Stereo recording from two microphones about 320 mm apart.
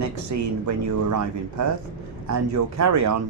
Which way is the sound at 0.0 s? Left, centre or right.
Right.